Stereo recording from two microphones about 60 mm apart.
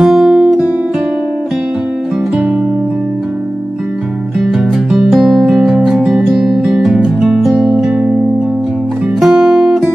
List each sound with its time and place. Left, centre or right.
0.0 s guitar: centre
4.4 s music: centre
7.5 s music: centre
7.8 s music: centre
9.2 s music: centre